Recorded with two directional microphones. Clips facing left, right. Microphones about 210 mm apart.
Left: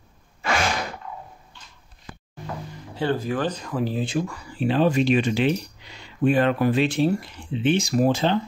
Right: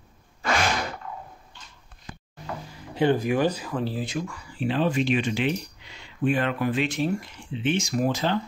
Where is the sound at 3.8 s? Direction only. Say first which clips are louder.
Left 7 dB; 25° left (ahead or behind).